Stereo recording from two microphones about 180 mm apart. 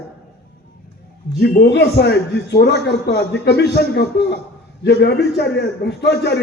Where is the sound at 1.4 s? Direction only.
60° left (ahead or behind).